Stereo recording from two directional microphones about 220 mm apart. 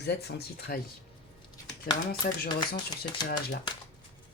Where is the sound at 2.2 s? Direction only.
40° left (ahead or behind).